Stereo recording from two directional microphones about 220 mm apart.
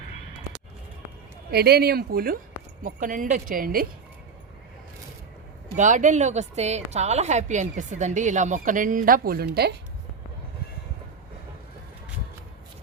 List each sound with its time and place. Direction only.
1.5 s a woman's voice: 45° right (ahead or behind)
5.7 s a woman's voice: 35° right (ahead or behind)